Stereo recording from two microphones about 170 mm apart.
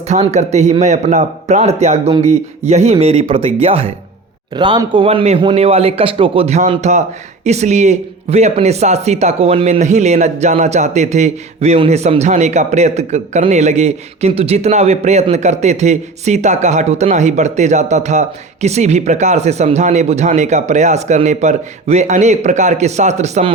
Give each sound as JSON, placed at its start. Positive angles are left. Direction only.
{"t": 0.1, "sound": "speech", "side_deg": -40}